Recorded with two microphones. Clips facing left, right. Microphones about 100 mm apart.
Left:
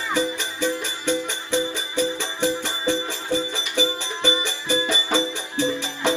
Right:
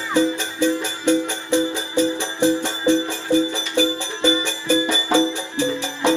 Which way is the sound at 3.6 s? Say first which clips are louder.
Right 4 dB; 15° left (ahead or behind).